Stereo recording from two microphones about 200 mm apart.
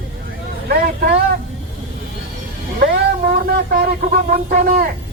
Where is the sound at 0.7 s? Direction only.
50° right (ahead or behind).